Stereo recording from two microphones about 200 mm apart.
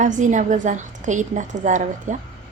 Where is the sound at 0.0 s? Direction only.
40° right (ahead or behind).